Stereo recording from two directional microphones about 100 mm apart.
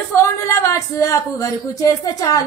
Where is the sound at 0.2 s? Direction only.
30° left (ahead or behind).